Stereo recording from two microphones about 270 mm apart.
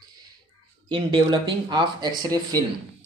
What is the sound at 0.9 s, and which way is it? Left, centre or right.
Speech, centre.